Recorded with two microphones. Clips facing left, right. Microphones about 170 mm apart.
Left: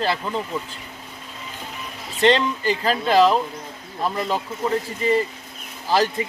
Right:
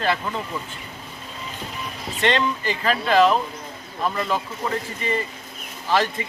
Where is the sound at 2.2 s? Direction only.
35° left (ahead or behind).